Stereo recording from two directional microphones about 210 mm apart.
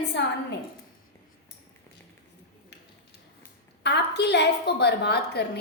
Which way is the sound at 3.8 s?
55° left (ahead or behind).